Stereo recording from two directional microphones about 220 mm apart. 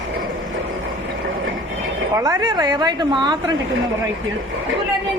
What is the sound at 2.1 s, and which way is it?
A woman's voice, 15° right (ahead or behind).